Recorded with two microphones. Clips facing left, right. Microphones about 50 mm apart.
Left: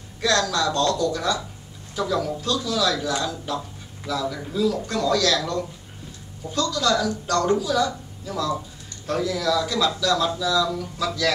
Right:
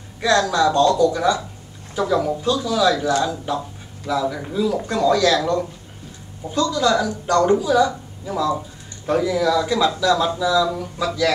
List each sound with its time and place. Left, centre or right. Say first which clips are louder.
0.2 s a man's voice: right 5 dB; centre